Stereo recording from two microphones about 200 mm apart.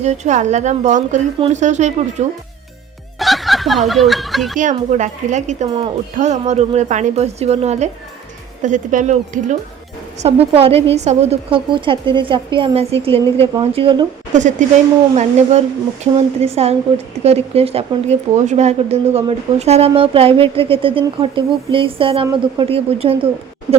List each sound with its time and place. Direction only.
0.0 s a woman's voice: 35° right (ahead or behind)
3.2 s fowl: centre (ahead or behind)
4.5 s a woman's voice: 35° right (ahead or behind)
14.6 s a woman's voice: 40° right (ahead or behind)